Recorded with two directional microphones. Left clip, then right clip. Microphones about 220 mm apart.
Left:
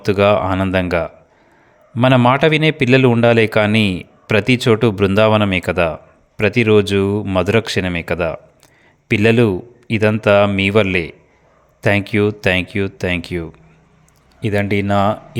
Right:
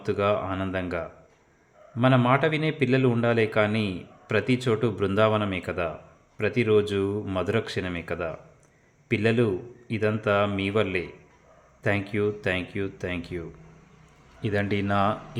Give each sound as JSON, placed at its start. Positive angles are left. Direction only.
{"t": 0.0, "sound": "a man's voice", "side_deg": 45}
{"t": 14.4, "sound": "speech", "side_deg": 35}